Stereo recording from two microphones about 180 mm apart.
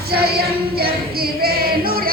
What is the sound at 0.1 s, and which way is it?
Female singing, 60° right (ahead or behind).